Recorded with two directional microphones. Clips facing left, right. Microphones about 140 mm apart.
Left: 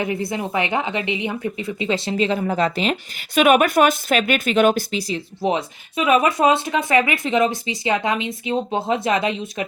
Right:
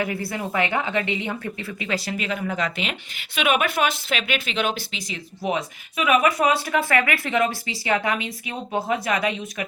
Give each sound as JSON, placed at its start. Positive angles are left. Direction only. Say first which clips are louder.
{"t": 0.0, "sound": "a woman's voice", "louder": "left 3 dB", "side_deg": 20}